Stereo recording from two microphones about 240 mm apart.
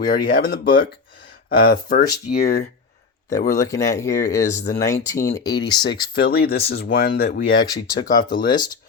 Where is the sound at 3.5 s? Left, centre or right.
Centre.